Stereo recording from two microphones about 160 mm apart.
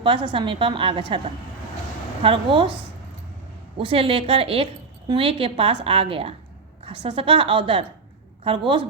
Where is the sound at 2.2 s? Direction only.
35° right (ahead or behind).